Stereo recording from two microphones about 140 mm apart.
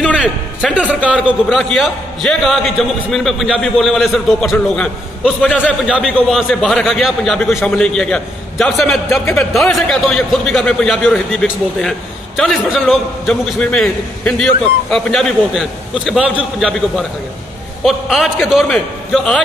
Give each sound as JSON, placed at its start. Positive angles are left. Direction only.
{"t": 0.2, "sound": "a man's voice", "side_deg": 0}
{"t": 1.6, "sound": "a man's voice", "side_deg": 5}
{"t": 5.6, "sound": "a man's voice", "side_deg": -5}
{"t": 9.2, "sound": "speech", "side_deg": 15}
{"t": 9.5, "sound": "a man's voice", "side_deg": 0}
{"t": 13.6, "sound": "a man's voice", "side_deg": 10}